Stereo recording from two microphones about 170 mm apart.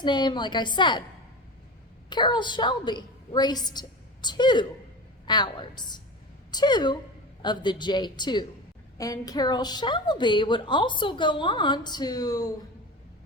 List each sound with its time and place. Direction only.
0.0 s a woman's voice: 25° left (ahead or behind)
2.0 s a woman's voice: 25° left (ahead or behind)